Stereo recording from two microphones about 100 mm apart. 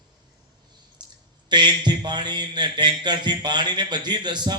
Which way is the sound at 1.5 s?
50° right (ahead or behind).